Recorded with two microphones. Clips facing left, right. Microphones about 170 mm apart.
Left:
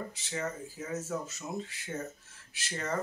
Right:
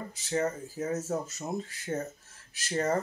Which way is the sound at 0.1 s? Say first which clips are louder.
Right 7 dB; 40° right (ahead or behind).